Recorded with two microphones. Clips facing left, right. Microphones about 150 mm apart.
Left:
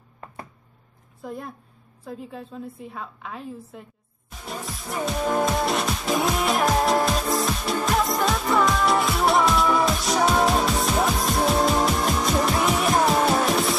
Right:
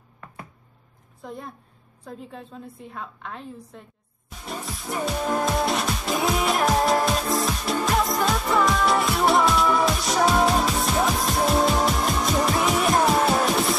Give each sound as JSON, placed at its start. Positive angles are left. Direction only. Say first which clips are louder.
{"t": 1.2, "sound": "a woman's voice", "louder": "left 2 dB", "side_deg": 0}
{"t": 4.5, "sound": "music", "louder": "right 1 dB", "side_deg": 0}